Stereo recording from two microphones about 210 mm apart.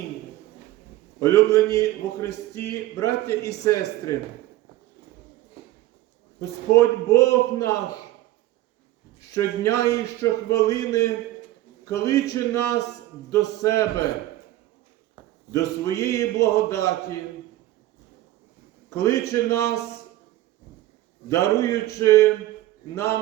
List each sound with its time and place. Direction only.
1.2 s speech: 15° left (ahead or behind)
6.7 s speech: 15° left (ahead or behind)
9.3 s speech: 15° left (ahead or behind)
15.5 s speech: 15° left (ahead or behind)
18.9 s speech: 15° left (ahead or behind)
21.2 s speech: 15° left (ahead or behind)